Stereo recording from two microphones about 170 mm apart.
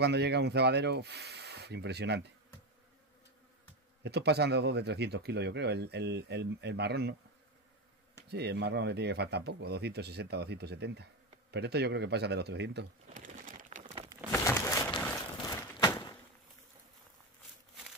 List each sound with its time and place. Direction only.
0.0 s speech: 80° right
4.0 s speech: 75° right (ahead or behind)
8.3 s speech: 75° right (ahead or behind)
13.1 s a sound: 50° right (ahead or behind)
14.3 s crumpling: 15° left (ahead or behind)
15.4 s a sound: 20° left (ahead or behind)